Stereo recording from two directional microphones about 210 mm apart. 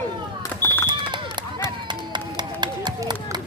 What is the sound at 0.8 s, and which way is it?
Run, 20° right (ahead or behind).